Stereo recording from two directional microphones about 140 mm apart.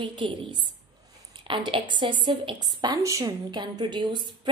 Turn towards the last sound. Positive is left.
turn(degrees=-35)  # may be behind; listen again after turning